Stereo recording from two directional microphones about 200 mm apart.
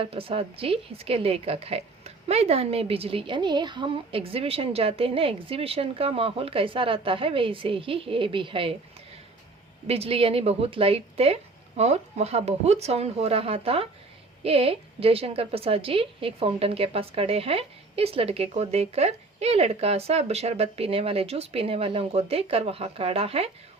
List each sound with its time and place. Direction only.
0.0 s a woman's voice: 25° right (ahead or behind)
9.8 s a woman's voice: 30° right (ahead or behind)